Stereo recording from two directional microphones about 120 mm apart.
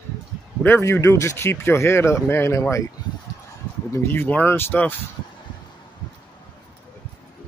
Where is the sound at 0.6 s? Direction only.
20° left (ahead or behind).